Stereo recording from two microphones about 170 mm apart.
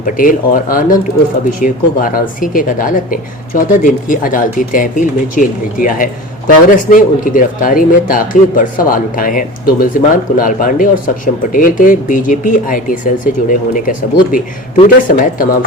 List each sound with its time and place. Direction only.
0.0 s speech: 55° left (ahead or behind)